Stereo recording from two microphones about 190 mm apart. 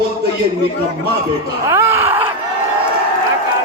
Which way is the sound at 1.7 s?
15° right (ahead or behind).